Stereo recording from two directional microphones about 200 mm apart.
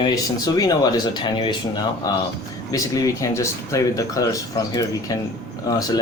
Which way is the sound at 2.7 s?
15° left (ahead or behind).